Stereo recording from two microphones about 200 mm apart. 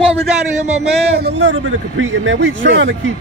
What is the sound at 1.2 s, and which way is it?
Speech, 65° right (ahead or behind).